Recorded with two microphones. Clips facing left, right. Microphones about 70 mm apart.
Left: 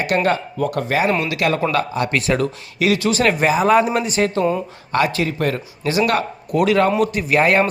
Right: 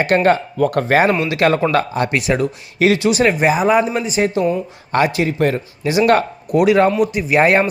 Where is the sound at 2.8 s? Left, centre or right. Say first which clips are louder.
Right 3 dB; right.